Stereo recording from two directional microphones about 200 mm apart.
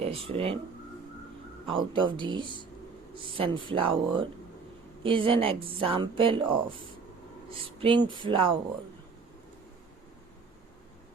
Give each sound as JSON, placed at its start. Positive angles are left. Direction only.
{"t": 0.0, "sound": "speech", "side_deg": -30}
{"t": 1.6, "sound": "speech", "side_deg": -25}
{"t": 7.8, "sound": "speech", "side_deg": -25}